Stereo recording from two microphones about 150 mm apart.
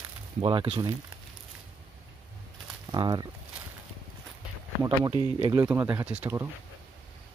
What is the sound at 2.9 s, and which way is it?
Speech, 30° right (ahead or behind).